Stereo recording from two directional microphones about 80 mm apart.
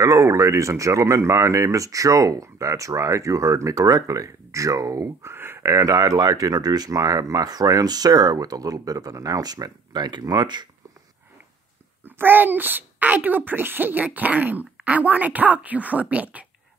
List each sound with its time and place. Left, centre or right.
0.0 s speech: right
5.0 s speech: right
12.0 s a child's voice: right